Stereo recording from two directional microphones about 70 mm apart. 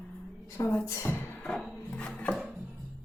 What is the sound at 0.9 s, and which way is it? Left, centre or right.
Speech, left.